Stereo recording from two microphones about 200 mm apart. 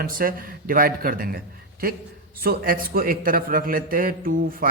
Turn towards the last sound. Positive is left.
turn(degrees=-45)  # may be behind; listen again after turning